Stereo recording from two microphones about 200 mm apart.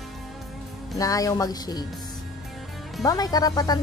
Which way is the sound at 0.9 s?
15° left (ahead or behind).